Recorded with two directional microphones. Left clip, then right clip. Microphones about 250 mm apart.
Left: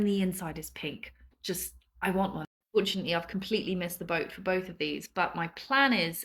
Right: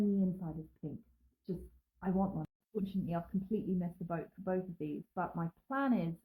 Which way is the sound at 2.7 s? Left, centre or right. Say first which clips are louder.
Left 12 dB; centre.